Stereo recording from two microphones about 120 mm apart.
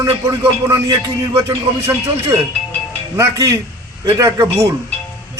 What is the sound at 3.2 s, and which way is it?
Speech, 25° right (ahead or behind).